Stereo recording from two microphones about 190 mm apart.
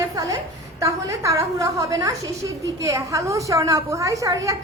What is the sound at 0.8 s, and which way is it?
A woman's voice, 15° right (ahead or behind).